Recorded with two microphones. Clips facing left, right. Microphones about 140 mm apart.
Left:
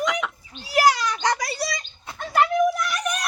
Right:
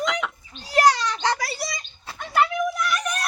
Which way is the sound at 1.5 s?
20° right (ahead or behind).